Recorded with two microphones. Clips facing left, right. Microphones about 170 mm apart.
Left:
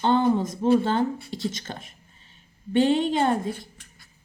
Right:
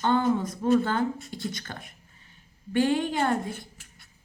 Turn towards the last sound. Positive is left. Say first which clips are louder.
# left 3 dB
turn(degrees=25)  # may be behind; listen again after turning